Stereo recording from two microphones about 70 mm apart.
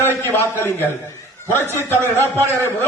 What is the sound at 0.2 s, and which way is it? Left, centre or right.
A man's voice, left.